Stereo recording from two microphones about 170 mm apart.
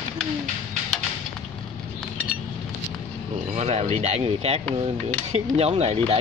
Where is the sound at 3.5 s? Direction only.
40° right (ahead or behind).